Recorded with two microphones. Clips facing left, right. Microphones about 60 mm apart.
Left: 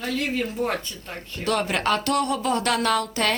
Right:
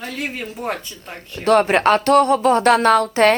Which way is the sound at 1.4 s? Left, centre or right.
Right.